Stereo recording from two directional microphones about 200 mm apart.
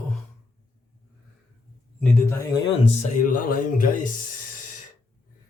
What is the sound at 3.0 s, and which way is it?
Speech, 45° left (ahead or behind).